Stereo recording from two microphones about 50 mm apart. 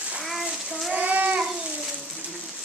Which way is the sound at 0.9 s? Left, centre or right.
Right.